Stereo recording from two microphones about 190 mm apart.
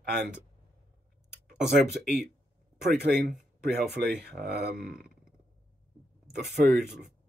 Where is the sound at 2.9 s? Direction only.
60° right (ahead or behind).